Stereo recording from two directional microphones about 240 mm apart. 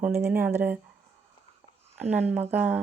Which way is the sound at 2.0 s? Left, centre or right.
Centre.